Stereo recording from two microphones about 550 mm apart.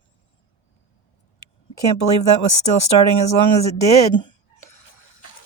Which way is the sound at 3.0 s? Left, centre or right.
Left.